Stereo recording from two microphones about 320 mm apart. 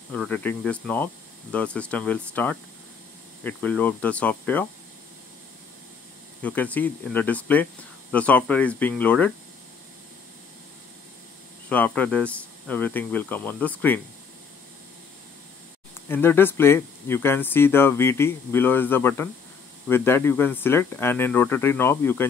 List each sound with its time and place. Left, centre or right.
0.1 s speech: centre
6.4 s speech: centre
11.7 s speech: centre
16.1 s speech: centre